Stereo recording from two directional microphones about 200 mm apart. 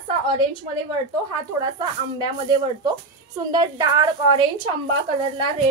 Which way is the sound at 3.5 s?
20° right (ahead or behind).